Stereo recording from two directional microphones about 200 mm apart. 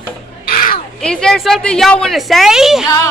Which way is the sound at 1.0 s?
5° left (ahead or behind).